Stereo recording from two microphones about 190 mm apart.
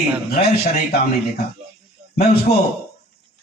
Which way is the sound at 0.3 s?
55° left (ahead or behind).